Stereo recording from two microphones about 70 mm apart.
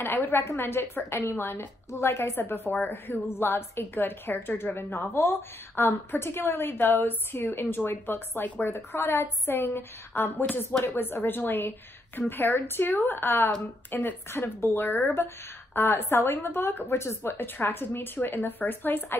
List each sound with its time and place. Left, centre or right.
0.0 s a woman's voice: left